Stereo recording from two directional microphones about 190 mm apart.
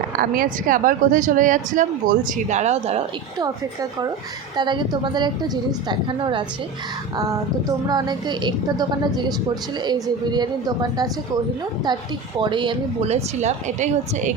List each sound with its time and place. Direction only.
0.2 s a woman's voice: 45° right (ahead or behind)
3.3 s a woman's voice: 20° right (ahead or behind)
7.9 s a woman's voice: 20° right (ahead or behind)
12.4 s a woman's voice: 25° right (ahead or behind)